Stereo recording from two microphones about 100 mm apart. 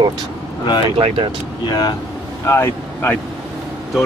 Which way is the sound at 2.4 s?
25° left (ahead or behind).